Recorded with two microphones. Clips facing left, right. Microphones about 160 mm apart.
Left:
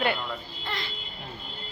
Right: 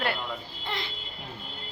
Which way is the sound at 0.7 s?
20° right (ahead or behind).